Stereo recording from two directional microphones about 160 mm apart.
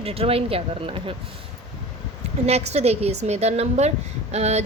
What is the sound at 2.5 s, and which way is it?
A woman's voice, 40° right (ahead or behind).